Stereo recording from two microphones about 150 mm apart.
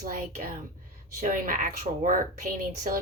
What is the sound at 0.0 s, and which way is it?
Speech, 65° right (ahead or behind).